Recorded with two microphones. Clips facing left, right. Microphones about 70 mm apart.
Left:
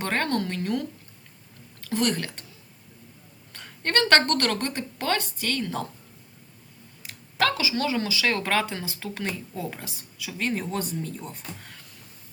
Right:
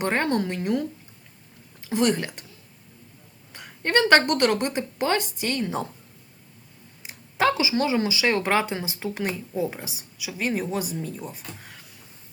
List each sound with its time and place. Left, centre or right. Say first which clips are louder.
0.0 s speech: right 3 dB; centre
3.5 s speech: right 4 dB; centre
7.0 s speech: right 3 dB; centre